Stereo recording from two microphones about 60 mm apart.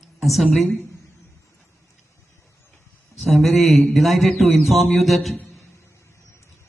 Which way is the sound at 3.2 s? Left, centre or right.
Centre.